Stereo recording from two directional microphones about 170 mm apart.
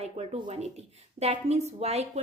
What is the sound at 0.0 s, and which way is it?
A woman's voice, 40° right (ahead or behind).